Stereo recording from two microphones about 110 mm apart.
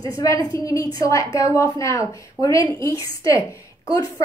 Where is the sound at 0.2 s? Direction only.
30° left (ahead or behind).